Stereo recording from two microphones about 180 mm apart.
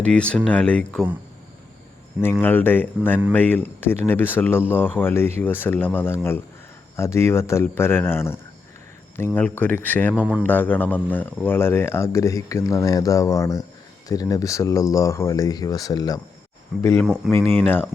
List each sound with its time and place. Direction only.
0.0 s speech: 5° left (ahead or behind)
2.4 s speech: 10° left (ahead or behind)
10.2 s speech: 5° right (ahead or behind)
10.4 s speech: 10° left (ahead or behind)
17.4 s speech: 35° right (ahead or behind)